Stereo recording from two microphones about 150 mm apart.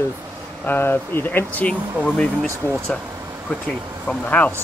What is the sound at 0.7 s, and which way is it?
Speech, 15° left (ahead or behind).